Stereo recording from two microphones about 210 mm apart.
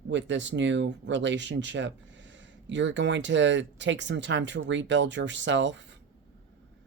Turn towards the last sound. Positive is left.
turn(degrees=-60)  # may be behind; listen again after turning